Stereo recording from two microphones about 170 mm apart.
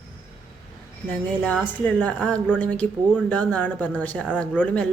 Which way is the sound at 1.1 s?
10° left (ahead or behind).